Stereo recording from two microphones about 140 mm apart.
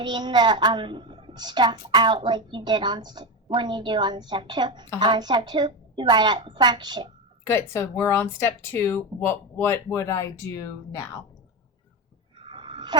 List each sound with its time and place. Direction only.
0.0 s a child's voice: 30° right (ahead or behind)
7.4 s speech: 20° left (ahead or behind)
12.4 s a sound: 35° right (ahead or behind)